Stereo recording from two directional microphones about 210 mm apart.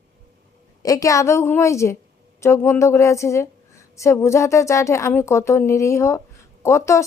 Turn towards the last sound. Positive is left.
turn(degrees=15)  # may be behind; listen again after turning